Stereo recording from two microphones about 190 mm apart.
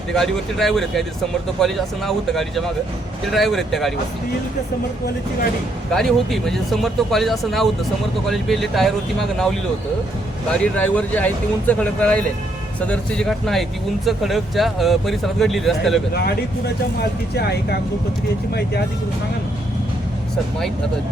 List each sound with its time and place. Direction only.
0.1 s speech: centre (ahead or behind)
5.9 s speech: centre (ahead or behind)
10.5 s speech: 5° left (ahead or behind)
17.0 s speech: 60° left (ahead or behind)